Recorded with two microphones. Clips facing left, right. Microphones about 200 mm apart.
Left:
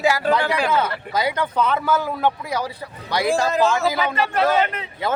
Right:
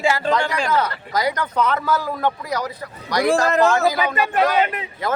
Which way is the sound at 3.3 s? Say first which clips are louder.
Right 2 dB; 65° right (ahead or behind).